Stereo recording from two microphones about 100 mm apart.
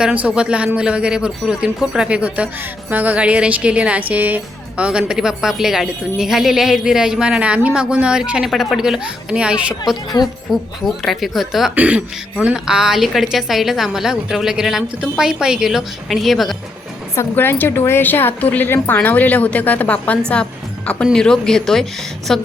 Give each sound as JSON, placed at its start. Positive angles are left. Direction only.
{"t": 0.0, "sound": "speech", "side_deg": -15}
{"t": 11.7, "sound": "speech", "side_deg": -15}
{"t": 17.2, "sound": "a woman's voice", "side_deg": 25}